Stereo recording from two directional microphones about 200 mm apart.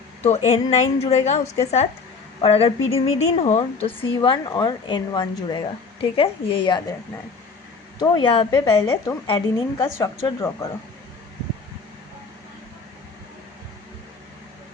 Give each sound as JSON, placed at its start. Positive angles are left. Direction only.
{"t": 0.3, "sound": "a woman's voice", "side_deg": 30}
{"t": 7.9, "sound": "a woman's voice", "side_deg": 20}